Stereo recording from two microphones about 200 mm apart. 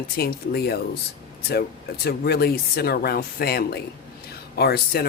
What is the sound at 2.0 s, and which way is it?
Speech, 50° left (ahead or behind).